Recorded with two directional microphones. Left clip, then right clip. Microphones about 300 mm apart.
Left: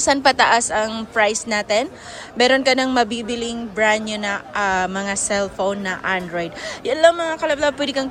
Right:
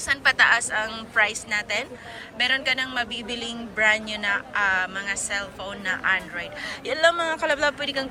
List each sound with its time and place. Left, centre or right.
0.0 s a man's voice: centre